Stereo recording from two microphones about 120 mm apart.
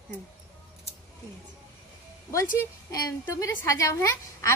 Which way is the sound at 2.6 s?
30° left (ahead or behind).